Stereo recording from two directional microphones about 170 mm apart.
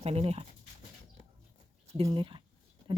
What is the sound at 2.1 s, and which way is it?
Speech, 30° right (ahead or behind).